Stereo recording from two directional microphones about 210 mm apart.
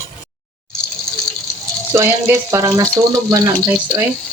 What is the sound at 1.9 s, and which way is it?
Speech, 10° right (ahead or behind).